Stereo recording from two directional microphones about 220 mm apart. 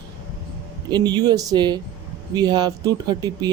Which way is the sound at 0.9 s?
20° right (ahead or behind).